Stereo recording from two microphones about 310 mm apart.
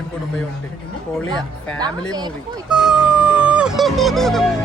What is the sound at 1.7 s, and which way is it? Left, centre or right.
Speech, centre.